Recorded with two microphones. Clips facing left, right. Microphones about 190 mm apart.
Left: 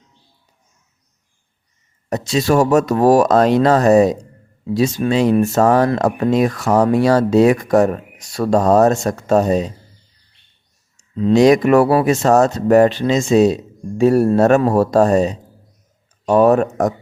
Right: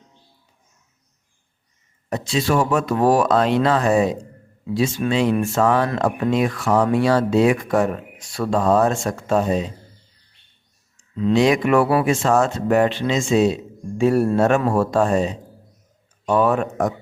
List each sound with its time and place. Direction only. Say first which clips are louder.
2.0 s speech: left 4 dB; 40° left (ahead or behind)
10.9 s speech: left 4 dB; 35° left (ahead or behind)